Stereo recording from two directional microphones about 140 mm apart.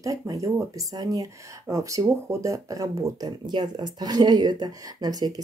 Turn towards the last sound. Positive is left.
turn(degrees=-30)  # may be behind; listen again after turning